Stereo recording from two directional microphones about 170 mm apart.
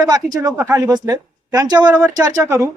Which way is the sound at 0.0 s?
20° right (ahead or behind).